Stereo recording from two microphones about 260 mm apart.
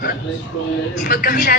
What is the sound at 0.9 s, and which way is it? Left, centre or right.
Speech, left.